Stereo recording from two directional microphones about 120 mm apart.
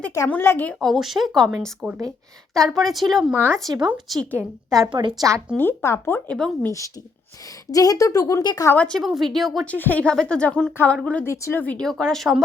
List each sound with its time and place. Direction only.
0.3 s speech: 15° left (ahead or behind)
0.8 s speech: centre (ahead or behind)
3.3 s speech: 15° right (ahead or behind)
3.8 s speech: 5° right (ahead or behind)
4.4 s a woman's voice: 30° right (ahead or behind)
5.5 s speech: 20° left (ahead or behind)
6.3 s speech: 5° left (ahead or behind)
6.7 s speech: 25° left (ahead or behind)
8.7 s speech: 10° left (ahead or behind)
9.0 s speech: centre (ahead or behind)
9.6 s speech: 15° left (ahead or behind)
11.6 s speech: 10° left (ahead or behind)